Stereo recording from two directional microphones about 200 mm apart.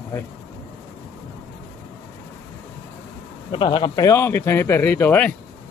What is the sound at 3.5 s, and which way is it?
Speech, 25° left (ahead or behind).